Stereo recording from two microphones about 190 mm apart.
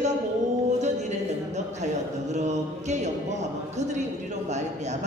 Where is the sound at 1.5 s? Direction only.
40° right (ahead or behind).